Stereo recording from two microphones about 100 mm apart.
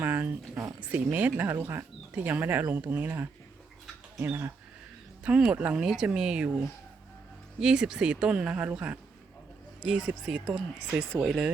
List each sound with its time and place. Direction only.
0.0 s a sound: 20° right (ahead or behind)
0.8 s speech: 15° right (ahead or behind)
5.2 s speech: 10° right (ahead or behind)